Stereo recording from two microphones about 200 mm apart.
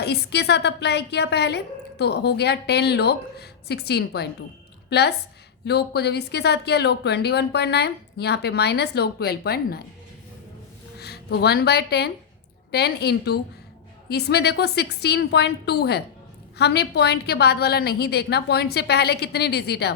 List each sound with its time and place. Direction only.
0.0 s a woman's voice: 55° left (ahead or behind)
11.0 s a woman's voice: 55° left (ahead or behind)